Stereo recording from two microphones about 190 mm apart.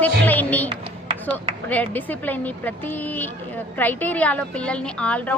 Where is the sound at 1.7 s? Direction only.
10° left (ahead or behind).